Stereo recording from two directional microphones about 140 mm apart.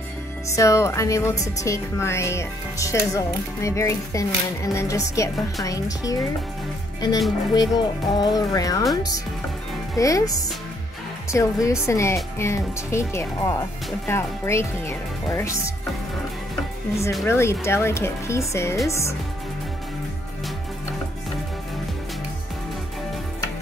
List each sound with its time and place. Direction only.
0.5 s speech: 20° left (ahead or behind)
9.9 s speech: 25° left (ahead or behind)
17.3 s speech: 20° left (ahead or behind)